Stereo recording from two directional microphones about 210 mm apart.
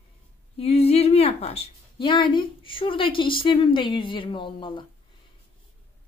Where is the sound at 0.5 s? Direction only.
30° left (ahead or behind).